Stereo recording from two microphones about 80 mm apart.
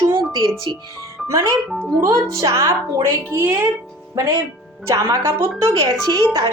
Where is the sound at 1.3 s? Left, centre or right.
Right.